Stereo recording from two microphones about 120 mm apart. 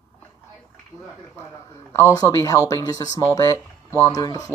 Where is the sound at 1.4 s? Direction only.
20° left (ahead or behind).